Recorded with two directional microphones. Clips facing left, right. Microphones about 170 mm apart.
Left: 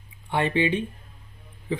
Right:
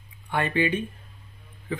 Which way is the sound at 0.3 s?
25° left (ahead or behind).